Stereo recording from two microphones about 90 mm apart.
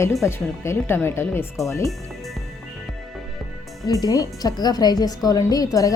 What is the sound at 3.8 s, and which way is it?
A woman's voice, 40° left (ahead or behind).